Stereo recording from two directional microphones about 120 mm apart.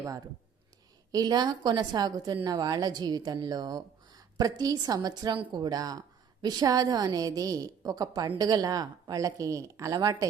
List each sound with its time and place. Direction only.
1.1 s a woman's voice: 35° right (ahead or behind)